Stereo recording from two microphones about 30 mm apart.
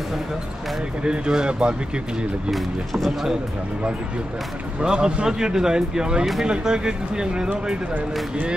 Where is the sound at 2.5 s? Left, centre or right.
Centre.